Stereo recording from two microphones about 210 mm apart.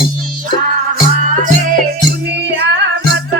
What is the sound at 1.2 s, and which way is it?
Music, 35° right (ahead or behind).